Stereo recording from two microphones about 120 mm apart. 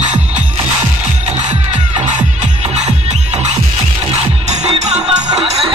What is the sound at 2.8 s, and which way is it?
Music, 75° right (ahead or behind).